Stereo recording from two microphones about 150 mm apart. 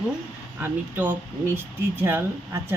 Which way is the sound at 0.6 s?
10° right (ahead or behind).